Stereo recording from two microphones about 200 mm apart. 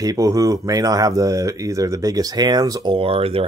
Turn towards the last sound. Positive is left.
turn(degrees=-30)  # may be behind; listen again after turning